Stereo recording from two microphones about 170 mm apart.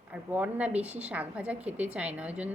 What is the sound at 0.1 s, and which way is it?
A woman's voice, 10° right (ahead or behind).